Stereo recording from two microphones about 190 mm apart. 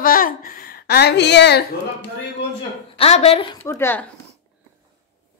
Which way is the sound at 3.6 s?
10° left (ahead or behind).